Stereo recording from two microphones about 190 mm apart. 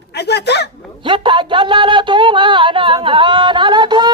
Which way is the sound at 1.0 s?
25° right (ahead or behind).